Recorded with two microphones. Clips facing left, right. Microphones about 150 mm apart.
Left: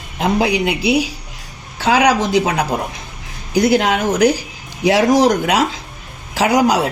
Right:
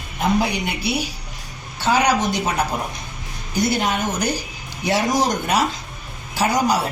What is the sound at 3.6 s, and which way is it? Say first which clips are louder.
Speech: left 7 dB; 90° left.